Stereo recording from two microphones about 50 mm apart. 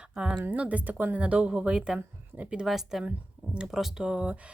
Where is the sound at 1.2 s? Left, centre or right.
Right.